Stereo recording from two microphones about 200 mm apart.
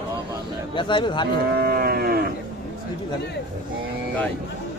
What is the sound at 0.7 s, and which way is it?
Speech, 25° left (ahead or behind).